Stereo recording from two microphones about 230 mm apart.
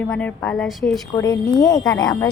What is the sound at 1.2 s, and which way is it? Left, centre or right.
Speech, centre.